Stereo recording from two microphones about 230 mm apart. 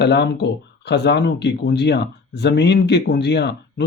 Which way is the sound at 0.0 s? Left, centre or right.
Left.